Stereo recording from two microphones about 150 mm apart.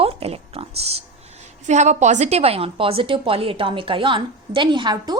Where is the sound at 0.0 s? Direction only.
40° right (ahead or behind).